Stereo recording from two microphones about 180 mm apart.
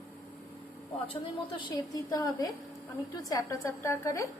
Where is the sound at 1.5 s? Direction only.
25° left (ahead or behind).